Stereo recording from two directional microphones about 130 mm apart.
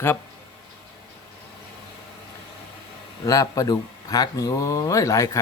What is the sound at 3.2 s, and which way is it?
Speech, 25° left (ahead or behind).